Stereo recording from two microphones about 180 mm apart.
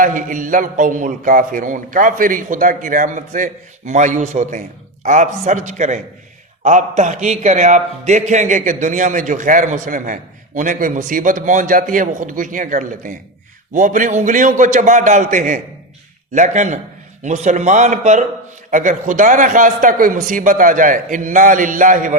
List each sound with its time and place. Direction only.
0.0 s a man's voice: 45° right (ahead or behind)